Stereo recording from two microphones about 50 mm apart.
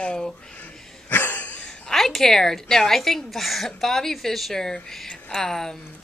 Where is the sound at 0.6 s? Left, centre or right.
Left.